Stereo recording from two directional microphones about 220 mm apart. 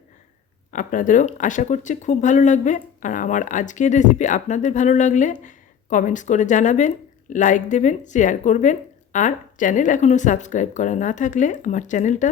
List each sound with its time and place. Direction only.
0.7 s speech: 35° left (ahead or behind)